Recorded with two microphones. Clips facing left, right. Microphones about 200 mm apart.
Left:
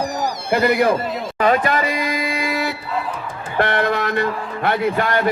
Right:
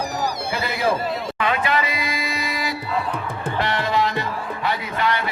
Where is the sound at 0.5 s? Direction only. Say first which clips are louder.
Left 10 dB; 60° left (ahead or behind).